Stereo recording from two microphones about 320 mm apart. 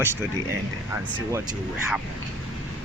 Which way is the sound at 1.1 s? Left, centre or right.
Centre.